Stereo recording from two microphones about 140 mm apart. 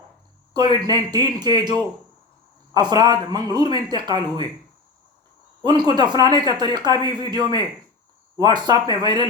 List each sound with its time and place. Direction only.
0.5 s speech: 30° right (ahead or behind)
5.6 s speech: 30° right (ahead or behind)